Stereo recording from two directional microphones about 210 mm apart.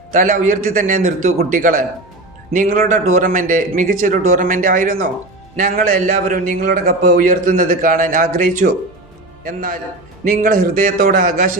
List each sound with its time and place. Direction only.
0.1 s a man's voice: 40° right (ahead or behind)